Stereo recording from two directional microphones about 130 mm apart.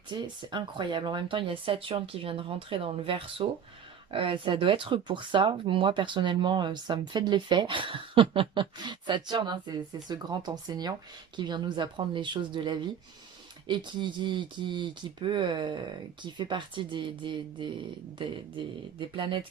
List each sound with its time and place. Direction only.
0.1 s speech: 35° right (ahead or behind)